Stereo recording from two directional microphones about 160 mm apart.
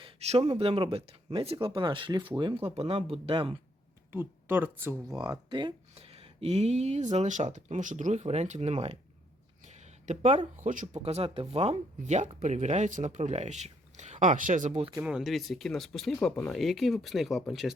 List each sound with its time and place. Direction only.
0.0 s speech: 40° right (ahead or behind)
4.1 s speech: 15° right (ahead or behind); by 5.7 s 30° right (ahead or behind)
5.9 s speech: 40° right (ahead or behind)
11.0 s speech: 35° right (ahead or behind)
14.9 s speech: 5° right (ahead or behind)